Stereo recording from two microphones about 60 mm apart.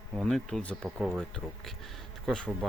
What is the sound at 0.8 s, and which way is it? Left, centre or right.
Speech, centre.